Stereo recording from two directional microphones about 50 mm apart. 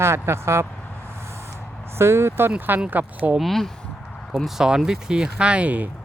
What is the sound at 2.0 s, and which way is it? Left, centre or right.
Speech, right.